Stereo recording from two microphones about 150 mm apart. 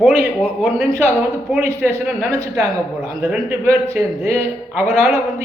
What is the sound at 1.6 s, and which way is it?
A man's voice, 15° right (ahead or behind).